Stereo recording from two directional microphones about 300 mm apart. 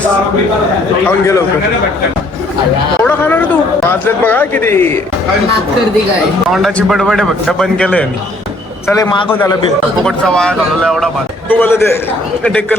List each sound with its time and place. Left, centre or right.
1.0 s a man's voice: centre
3.0 s a man's voice: centre
6.5 s speech: centre
8.9 s a man's voice: centre